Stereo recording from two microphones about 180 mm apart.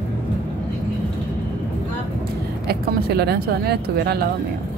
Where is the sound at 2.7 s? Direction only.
60° right (ahead or behind).